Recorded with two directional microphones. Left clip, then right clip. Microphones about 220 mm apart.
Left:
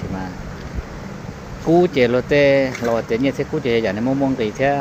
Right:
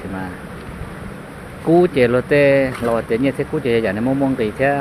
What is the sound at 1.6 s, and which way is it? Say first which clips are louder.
Speech: right 1 dB; 5° right (ahead or behind).